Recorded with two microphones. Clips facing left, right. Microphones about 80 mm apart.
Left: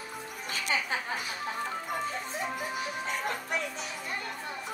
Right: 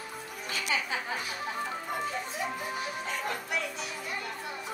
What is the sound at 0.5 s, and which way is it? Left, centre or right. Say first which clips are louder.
Music: even; left.